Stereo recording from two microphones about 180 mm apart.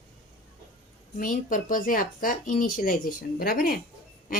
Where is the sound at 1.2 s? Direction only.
50° left (ahead or behind).